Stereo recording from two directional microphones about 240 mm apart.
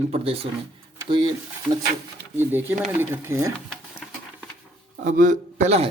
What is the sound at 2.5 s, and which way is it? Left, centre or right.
Speech, centre.